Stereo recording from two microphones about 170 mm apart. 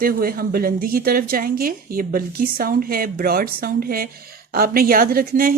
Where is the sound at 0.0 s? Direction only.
60° right (ahead or behind).